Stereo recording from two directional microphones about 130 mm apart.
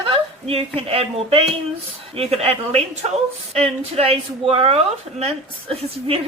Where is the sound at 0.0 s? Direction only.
45° right (ahead or behind).